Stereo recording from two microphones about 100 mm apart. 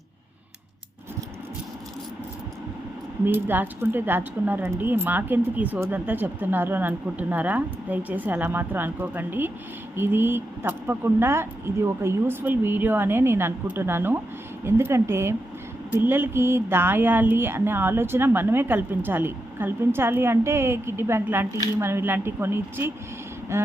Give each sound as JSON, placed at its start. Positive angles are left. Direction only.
{"t": 3.2, "sound": "speech", "side_deg": -20}